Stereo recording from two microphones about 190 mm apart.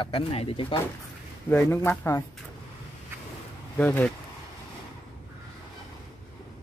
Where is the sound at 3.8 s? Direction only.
10° left (ahead or behind).